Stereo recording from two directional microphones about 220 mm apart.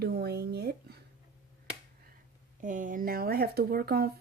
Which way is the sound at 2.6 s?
35° right (ahead or behind).